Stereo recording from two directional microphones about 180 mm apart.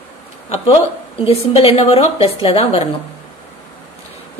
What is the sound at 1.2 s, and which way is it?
A woman's voice, 35° left (ahead or behind).